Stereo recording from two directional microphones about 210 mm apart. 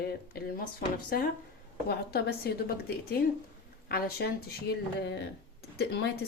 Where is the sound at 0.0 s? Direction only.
45° left (ahead or behind).